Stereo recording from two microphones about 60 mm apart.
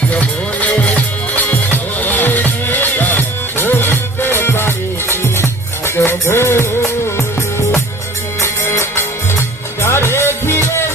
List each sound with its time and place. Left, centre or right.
0.1 s music: left
8.4 s music: left